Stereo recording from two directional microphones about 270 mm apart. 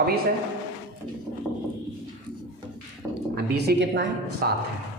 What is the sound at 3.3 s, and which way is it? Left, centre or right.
Speech, right.